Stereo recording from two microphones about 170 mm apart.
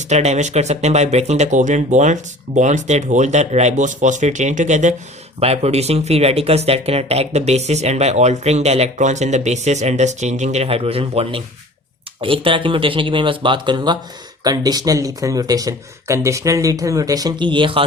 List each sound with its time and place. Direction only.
0.0 s speech: 40° right (ahead or behind)